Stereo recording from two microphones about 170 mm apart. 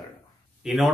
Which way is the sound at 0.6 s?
Centre (ahead or behind).